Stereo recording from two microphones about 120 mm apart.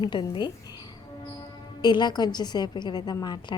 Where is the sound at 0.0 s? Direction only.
40° left (ahead or behind).